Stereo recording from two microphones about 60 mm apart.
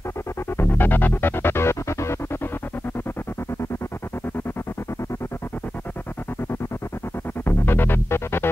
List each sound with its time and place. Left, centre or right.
0.6 s music: left
7.4 s music: left